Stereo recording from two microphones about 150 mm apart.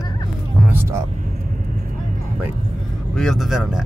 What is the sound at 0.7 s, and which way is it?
Vehicle, 15° right (ahead or behind).